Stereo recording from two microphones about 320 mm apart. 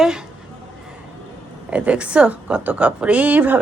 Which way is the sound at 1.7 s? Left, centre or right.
Centre.